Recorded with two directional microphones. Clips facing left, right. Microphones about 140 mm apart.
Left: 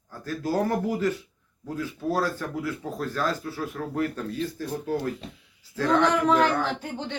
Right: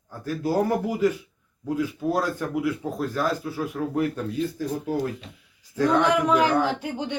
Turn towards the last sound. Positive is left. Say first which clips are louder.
# right 4 dB
turn(degrees=-10)  # may be behind; listen again after turning